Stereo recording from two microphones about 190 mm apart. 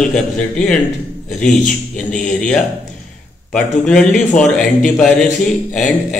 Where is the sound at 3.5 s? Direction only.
5° left (ahead or behind).